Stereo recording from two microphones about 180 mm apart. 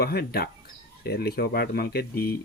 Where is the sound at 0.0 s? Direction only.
60° left (ahead or behind).